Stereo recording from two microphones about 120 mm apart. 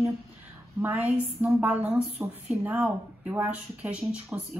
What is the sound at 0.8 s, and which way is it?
A woman's voice, 15° right (ahead or behind).